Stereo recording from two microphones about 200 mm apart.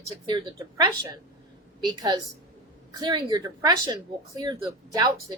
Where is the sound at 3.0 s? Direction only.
20° right (ahead or behind).